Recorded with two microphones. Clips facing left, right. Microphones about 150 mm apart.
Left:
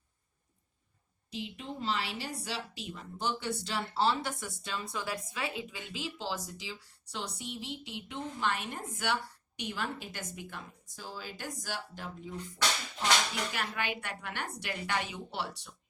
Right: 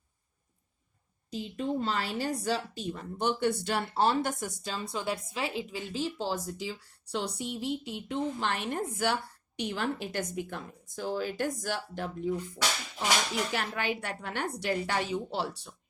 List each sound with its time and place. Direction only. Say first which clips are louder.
1.5 s a woman's voice: right 6 dB; 50° right (ahead or behind)
12.5 s speech: right 1 dB; 10° right (ahead or behind)
13.5 s speech: right 4 dB; 40° right (ahead or behind)